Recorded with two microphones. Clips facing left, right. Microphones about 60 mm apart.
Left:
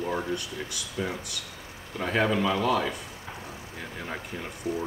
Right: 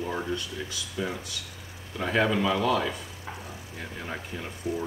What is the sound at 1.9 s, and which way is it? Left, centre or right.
Speech, centre.